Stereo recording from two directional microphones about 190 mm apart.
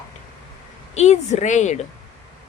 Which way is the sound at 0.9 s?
35° left (ahead or behind).